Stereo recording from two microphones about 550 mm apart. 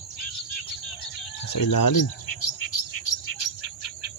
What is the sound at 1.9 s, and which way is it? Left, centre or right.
Bird, left.